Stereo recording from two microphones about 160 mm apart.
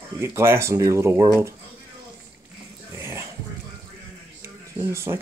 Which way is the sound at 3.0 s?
15° right (ahead or behind).